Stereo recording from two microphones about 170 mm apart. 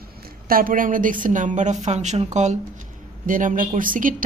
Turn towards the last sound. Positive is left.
turn(degrees=-50)  # may be behind; listen again after turning